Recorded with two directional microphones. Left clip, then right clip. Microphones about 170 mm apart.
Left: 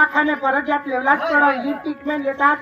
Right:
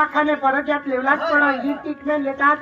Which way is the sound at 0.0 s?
35° left (ahead or behind).